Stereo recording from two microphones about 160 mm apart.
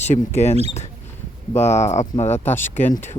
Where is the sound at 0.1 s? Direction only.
45° left (ahead or behind).